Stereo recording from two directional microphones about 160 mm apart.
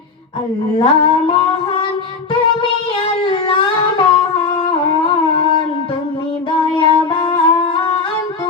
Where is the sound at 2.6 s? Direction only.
30° left (ahead or behind).